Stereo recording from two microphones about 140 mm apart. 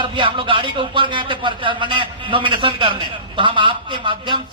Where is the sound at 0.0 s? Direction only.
40° right (ahead or behind).